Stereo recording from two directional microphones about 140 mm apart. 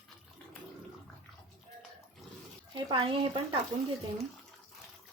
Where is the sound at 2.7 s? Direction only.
40° right (ahead or behind).